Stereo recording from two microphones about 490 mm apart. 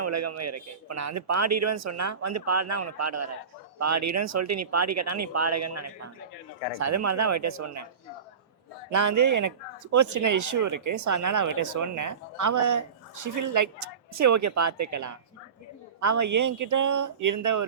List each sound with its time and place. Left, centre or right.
0.0 s speech: right
8.9 s speech: right